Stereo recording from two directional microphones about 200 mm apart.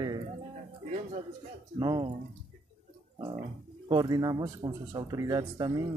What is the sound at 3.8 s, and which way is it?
Speech, 20° right (ahead or behind).